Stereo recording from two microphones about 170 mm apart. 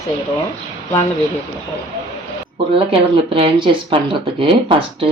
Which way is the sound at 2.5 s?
30° right (ahead or behind).